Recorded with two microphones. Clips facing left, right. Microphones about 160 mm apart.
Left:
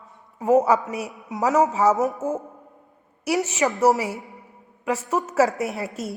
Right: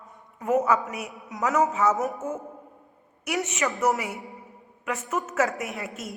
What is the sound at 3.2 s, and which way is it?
Speech, 35° left (ahead or behind).